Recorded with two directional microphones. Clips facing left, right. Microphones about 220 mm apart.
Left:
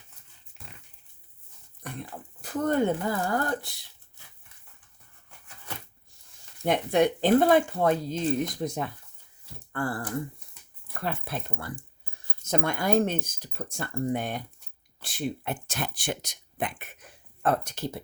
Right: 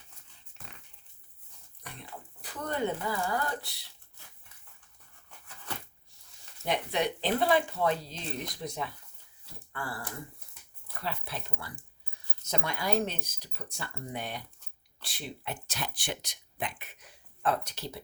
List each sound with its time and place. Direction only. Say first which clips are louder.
1.8 s speech: left 8 dB; 50° left (ahead or behind)
6.7 s speech: left 7 dB; 50° left (ahead or behind)
11.0 s speech: left 5 dB; 50° left (ahead or behind)